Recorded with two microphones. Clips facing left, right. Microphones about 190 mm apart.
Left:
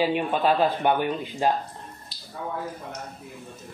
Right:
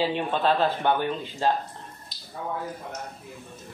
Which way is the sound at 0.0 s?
10° left (ahead or behind).